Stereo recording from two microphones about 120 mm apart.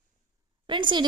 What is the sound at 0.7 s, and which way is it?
Speech, 40° right (ahead or behind).